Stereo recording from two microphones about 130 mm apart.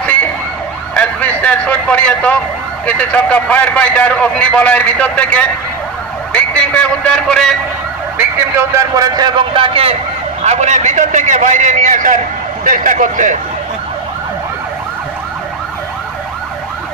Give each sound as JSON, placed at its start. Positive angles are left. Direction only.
{"t": 0.0, "sound": "emergency vehicle", "side_deg": 10}
{"t": 0.9, "sound": "a man's voice", "side_deg": 10}
{"t": 8.2, "sound": "a man's voice", "side_deg": -20}
{"t": 10.4, "sound": "a man's voice", "side_deg": -60}